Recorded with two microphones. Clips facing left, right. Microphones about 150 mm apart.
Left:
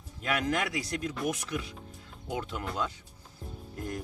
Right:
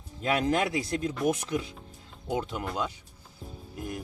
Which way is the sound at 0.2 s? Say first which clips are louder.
Right 4 dB; 30° right (ahead or behind).